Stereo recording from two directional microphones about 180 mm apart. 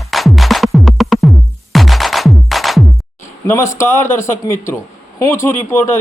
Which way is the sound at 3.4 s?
15° left (ahead or behind).